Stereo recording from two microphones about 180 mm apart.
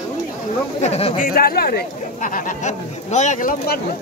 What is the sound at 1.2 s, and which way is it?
Speech, 55° left (ahead or behind).